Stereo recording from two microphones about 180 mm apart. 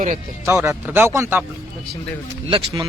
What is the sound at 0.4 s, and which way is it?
A man's voice, 15° right (ahead or behind).